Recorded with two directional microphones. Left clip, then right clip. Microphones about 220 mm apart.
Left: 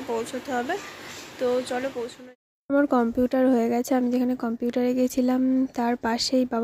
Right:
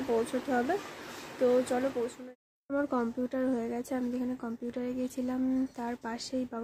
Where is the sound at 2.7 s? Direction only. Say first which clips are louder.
Left 10 dB; 25° left (ahead or behind).